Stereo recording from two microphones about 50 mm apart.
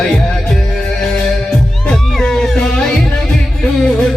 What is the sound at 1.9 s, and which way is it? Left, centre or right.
Music, left.